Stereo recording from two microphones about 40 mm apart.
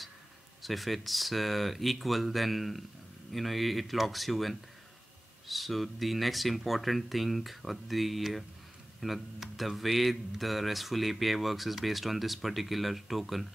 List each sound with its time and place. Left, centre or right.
0.6 s speech: centre